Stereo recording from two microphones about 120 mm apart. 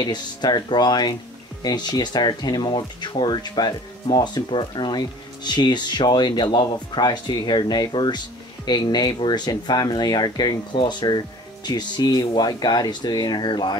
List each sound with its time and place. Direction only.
0.0 s speech: 35° left (ahead or behind)